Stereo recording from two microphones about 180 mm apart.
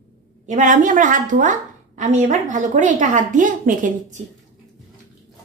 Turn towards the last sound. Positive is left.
turn(degrees=-45)  # may be behind; listen again after turning